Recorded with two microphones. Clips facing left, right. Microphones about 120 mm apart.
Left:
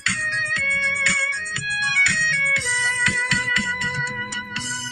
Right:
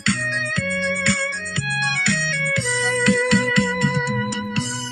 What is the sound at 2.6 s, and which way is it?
Music, 50° right (ahead or behind).